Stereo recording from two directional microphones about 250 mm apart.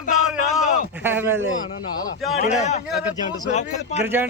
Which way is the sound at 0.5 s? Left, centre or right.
Centre.